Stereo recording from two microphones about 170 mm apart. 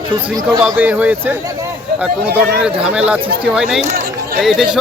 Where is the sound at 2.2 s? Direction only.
70° right (ahead or behind).